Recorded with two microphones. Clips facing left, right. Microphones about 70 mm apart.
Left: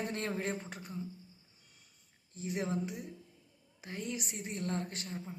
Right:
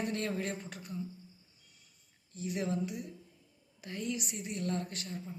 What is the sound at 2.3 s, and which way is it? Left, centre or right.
A woman's voice, left.